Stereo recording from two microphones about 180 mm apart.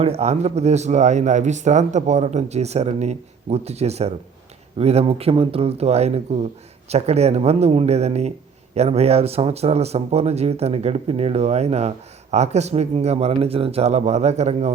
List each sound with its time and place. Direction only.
0.0 s a man's voice: 35° right (ahead or behind)